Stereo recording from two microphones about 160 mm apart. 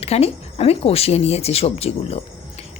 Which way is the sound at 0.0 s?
40° left (ahead or behind).